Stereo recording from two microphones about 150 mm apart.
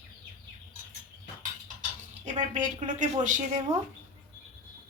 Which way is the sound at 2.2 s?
50° right (ahead or behind).